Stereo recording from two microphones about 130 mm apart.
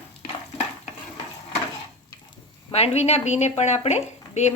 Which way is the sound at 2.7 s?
55° left (ahead or behind).